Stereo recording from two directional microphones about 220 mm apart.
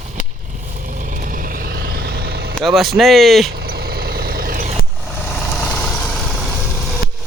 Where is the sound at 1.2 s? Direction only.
40° right (ahead or behind).